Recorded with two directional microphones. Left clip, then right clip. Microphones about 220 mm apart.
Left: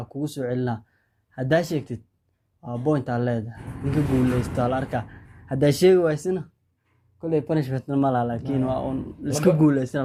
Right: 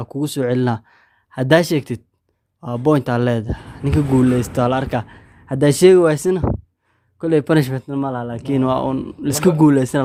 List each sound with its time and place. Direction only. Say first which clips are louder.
0.0 s speech: right 8 dB; 40° right (ahead or behind)
7.7 s speech: even; 15° right (ahead or behind)
8.3 s speech: right 7 dB; 35° right (ahead or behind)